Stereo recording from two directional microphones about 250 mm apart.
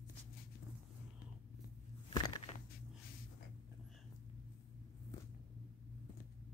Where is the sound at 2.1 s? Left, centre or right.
Centre.